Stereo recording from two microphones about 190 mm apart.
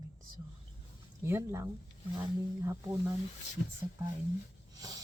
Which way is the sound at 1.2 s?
15° right (ahead or behind).